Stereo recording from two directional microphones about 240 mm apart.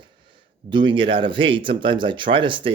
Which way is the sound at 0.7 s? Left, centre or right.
Centre.